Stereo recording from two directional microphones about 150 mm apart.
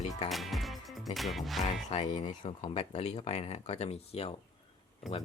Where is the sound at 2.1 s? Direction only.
30° left (ahead or behind).